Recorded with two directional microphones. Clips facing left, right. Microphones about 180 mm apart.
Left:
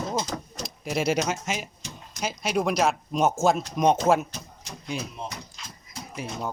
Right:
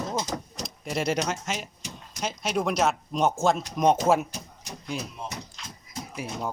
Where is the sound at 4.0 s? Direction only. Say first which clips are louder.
Left 1 dB; 10° right (ahead or behind).